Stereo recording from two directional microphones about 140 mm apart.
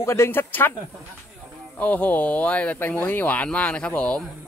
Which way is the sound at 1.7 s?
10° left (ahead or behind).